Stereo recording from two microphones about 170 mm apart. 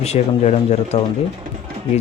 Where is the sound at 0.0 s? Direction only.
40° left (ahead or behind).